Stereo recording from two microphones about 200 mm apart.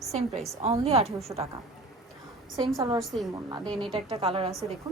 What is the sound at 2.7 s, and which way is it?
A woman's voice, 20° right (ahead or behind).